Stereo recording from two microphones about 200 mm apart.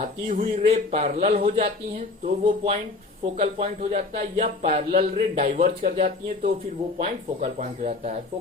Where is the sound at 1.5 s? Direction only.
40° right (ahead or behind).